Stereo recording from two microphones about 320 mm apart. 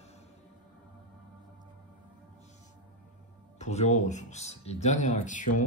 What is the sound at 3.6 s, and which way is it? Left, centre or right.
Speech, left.